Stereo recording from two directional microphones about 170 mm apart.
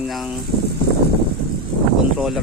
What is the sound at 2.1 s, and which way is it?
Speech, centre (ahead or behind).